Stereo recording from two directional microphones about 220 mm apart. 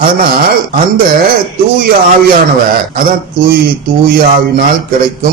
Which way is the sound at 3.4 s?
40° right (ahead or behind).